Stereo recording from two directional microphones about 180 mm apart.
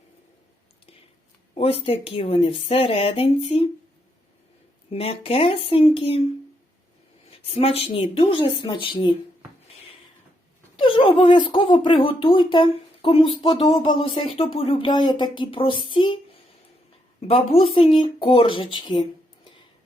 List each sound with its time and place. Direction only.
1.5 s speech: 30° left (ahead or behind)
4.9 s speech: 30° left (ahead or behind)
7.3 s speech: 30° left (ahead or behind)
10.8 s speech: 30° left (ahead or behind)
17.2 s speech: 35° left (ahead or behind)